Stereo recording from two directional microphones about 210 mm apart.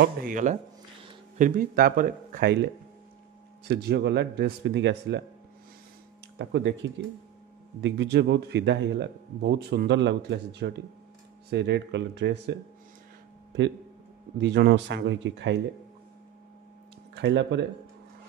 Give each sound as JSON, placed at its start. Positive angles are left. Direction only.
{"t": 0.0, "sound": "speech", "side_deg": -40}
{"t": 3.6, "sound": "speech", "side_deg": -50}
{"t": 6.3, "sound": "speech", "side_deg": -55}
{"t": 14.4, "sound": "speech", "side_deg": -50}
{"t": 17.1, "sound": "speech", "side_deg": -55}